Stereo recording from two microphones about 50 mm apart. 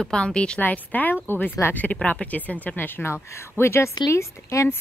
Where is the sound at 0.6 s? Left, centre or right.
Left.